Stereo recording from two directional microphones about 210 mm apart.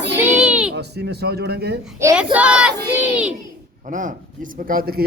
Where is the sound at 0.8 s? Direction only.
50° right (ahead or behind).